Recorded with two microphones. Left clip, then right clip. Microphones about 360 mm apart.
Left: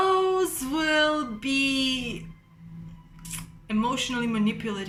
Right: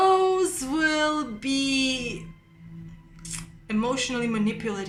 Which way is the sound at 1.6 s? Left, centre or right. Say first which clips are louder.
Right 2 dB; centre.